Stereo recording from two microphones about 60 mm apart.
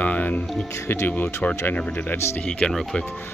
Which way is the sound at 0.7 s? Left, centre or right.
Left.